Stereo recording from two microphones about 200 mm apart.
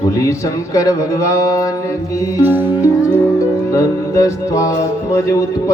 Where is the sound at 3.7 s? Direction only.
15° left (ahead or behind).